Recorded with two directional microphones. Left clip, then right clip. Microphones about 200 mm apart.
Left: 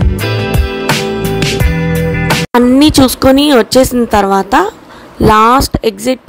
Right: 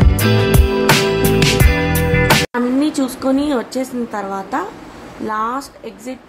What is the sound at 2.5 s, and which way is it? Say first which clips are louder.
Speech: left 10 dB; 40° left (ahead or behind).